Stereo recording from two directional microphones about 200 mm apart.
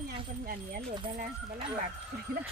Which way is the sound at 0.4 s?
45° right (ahead or behind).